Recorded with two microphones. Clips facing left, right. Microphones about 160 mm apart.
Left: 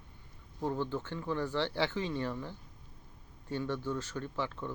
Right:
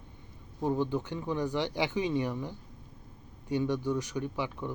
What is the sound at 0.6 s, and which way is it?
Speech, 15° right (ahead or behind).